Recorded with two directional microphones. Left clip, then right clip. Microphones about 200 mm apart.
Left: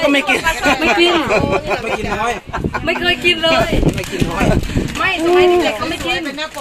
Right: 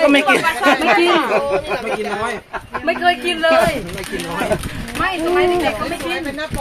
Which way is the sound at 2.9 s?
10° left (ahead or behind).